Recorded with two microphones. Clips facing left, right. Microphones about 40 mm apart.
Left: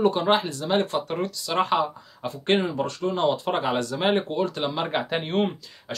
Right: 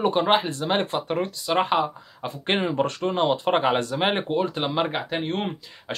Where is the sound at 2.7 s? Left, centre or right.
Right.